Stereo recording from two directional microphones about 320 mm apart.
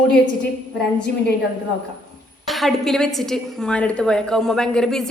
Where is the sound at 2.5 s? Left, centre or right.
Centre.